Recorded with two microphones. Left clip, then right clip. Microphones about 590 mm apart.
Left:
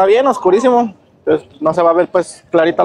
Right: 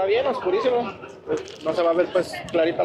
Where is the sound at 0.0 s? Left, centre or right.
Left.